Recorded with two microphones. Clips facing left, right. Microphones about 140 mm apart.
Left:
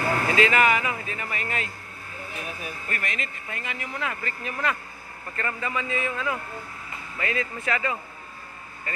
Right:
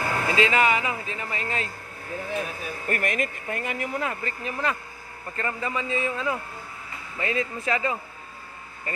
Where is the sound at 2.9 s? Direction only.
50° right (ahead or behind).